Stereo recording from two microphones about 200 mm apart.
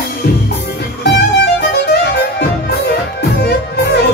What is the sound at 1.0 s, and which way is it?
Music, 55° left (ahead or behind).